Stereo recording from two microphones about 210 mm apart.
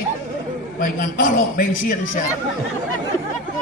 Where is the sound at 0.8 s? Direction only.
45° left (ahead or behind).